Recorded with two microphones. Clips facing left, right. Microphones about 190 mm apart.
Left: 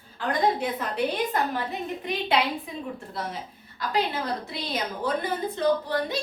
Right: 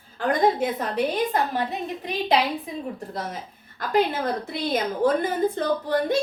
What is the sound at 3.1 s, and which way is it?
A woman's voice, 50° right (ahead or behind).